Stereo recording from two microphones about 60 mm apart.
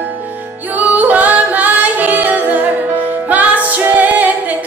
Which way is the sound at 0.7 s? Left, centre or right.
Right.